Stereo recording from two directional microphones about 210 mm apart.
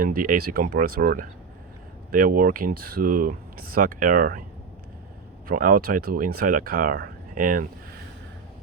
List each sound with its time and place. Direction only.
0.0 s speech: 40° right (ahead or behind)
5.5 s speech: 40° right (ahead or behind)